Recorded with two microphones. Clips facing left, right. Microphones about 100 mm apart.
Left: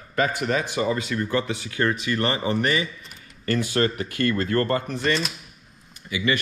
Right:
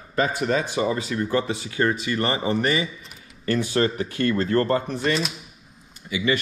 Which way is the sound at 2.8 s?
Centre (ahead or behind).